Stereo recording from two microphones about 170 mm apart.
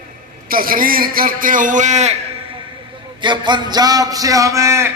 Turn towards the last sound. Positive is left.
turn(degrees=-15)  # may be behind; listen again after turning